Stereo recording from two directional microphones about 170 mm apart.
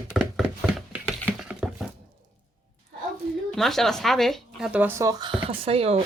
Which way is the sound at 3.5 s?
Centre (ahead or behind).